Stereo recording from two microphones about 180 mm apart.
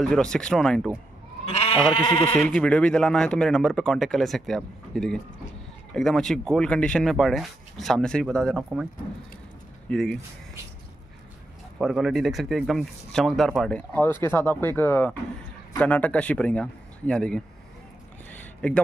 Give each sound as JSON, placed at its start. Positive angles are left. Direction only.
{"t": 0.0, "sound": "speech", "side_deg": 5}
{"t": 1.5, "sound": "goat", "side_deg": 30}
{"t": 2.2, "sound": "speech", "side_deg": 5}
{"t": 9.8, "sound": "speech", "side_deg": 0}
{"t": 11.8, "sound": "speech", "side_deg": 0}
{"t": 18.3, "sound": "a sound", "side_deg": 5}